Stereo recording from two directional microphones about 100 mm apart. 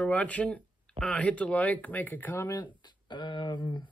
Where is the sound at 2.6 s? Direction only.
50° left (ahead or behind).